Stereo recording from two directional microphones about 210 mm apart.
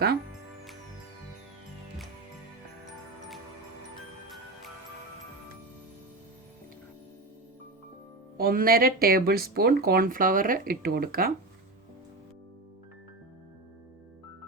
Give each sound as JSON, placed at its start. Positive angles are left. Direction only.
{"t": 8.4, "sound": "speech", "side_deg": -45}